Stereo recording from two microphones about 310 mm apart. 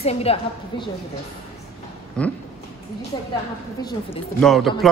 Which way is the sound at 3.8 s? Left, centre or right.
Centre.